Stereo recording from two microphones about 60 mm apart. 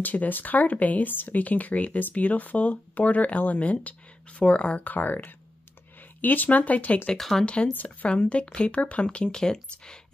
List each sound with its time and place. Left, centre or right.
0.0 s speech: left
7.2 s speech: centre
7.7 s speech: left; by 9.9 s centre